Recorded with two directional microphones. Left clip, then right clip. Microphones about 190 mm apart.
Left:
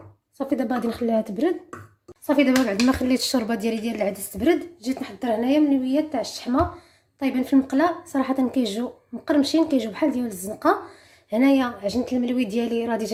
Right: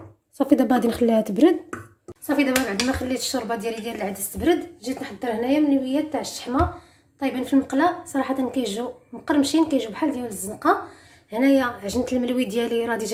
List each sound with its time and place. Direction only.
0.3 s a woman's voice: 10° right (ahead or behind)
2.2 s a woman's voice: 25° left (ahead or behind)
3.0 s a woman's voice: 40° left (ahead or behind); by 11.9 s 20° left (ahead or behind)
12.0 s a woman's voice: 10° left (ahead or behind)